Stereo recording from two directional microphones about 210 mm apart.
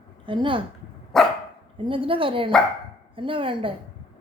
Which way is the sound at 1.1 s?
Centre (ahead or behind).